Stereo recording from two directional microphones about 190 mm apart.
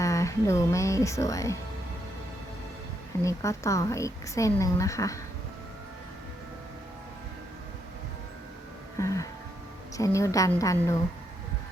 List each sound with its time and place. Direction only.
0.0 s speech: 15° left (ahead or behind)
3.2 s speech: 15° left (ahead or behind)
9.0 s music: 15° left (ahead or behind)
10.0 s speech: 15° left (ahead or behind)